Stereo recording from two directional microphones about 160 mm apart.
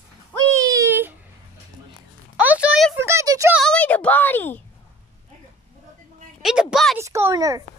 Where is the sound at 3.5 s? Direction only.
5° left (ahead or behind).